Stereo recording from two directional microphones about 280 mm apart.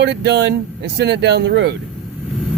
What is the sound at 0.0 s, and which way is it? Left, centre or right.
Speech, right.